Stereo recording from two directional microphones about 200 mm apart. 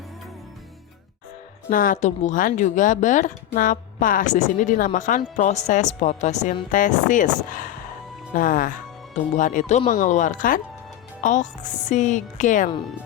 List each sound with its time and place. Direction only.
1.7 s speech: 45° left (ahead or behind)